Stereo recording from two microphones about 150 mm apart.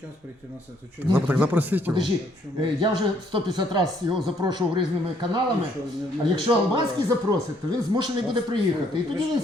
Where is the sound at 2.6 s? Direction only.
30° right (ahead or behind).